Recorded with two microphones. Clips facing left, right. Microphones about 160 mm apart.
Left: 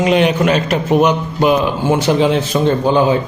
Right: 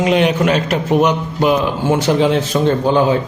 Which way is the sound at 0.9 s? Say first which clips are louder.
Left 1 dB; 15° left (ahead or behind).